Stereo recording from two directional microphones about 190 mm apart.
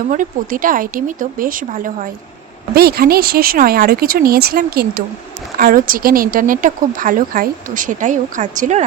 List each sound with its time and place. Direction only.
0.1 s speech: 45° right (ahead or behind)